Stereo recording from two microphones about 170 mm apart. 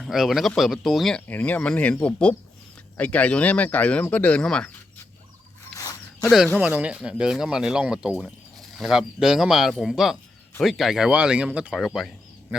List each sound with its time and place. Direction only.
0.0 s speech: centre (ahead or behind)
5.7 s zipper: 20° left (ahead or behind)
6.6 s speech: 10° right (ahead or behind)